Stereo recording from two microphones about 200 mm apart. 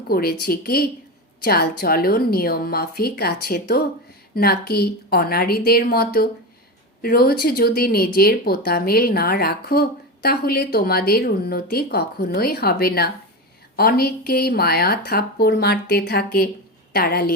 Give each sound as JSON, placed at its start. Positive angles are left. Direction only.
{"t": 0.1, "sound": "speech", "side_deg": 50}